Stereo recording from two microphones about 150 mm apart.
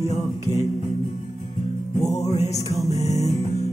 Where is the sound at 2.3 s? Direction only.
45° left (ahead or behind).